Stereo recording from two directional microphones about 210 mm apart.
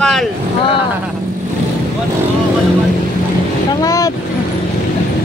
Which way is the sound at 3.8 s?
15° left (ahead or behind).